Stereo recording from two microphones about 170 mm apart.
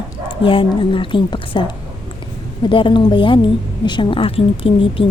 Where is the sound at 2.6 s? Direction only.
30° left (ahead or behind).